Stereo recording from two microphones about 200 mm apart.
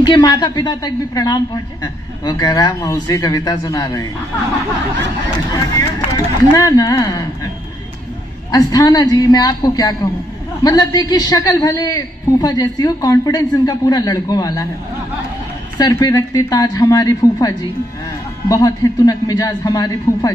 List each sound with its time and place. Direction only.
0.0 s a man's voice: 20° left (ahead or behind)
5.5 s a man's voice: 20° left (ahead or behind)
8.5 s a man's voice: 20° left (ahead or behind)
15.8 s a man's voice: 20° left (ahead or behind)